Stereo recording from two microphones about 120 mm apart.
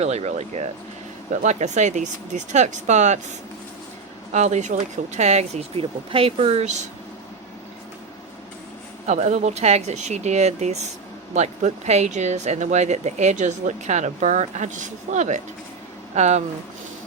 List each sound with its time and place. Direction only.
0.0 s speech: 65° right (ahead or behind)
1.3 s speech: 85° right; by 5.8 s 65° right (ahead or behind)
6.1 s speech: 50° right (ahead or behind); by 6.8 s 70° right (ahead or behind)
9.0 s speech: 70° right (ahead or behind)